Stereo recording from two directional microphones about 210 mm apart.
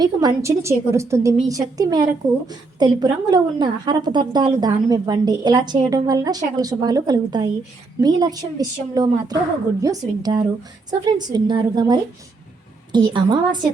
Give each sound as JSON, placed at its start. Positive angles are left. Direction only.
{"t": 0.0, "sound": "a woman's voice", "side_deg": -20}